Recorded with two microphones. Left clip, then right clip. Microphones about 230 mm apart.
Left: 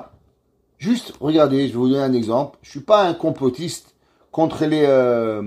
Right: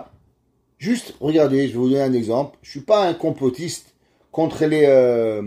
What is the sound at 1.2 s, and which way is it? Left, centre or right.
Speech, left.